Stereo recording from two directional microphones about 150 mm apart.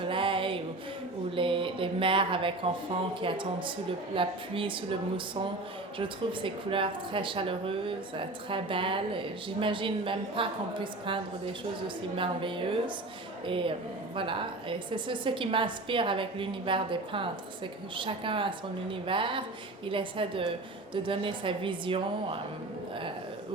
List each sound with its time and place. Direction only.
0.0 s music: 35° right (ahead or behind)
1.4 s a sound: 35° right (ahead or behind)
3.2 s speech: 35° right (ahead or behind)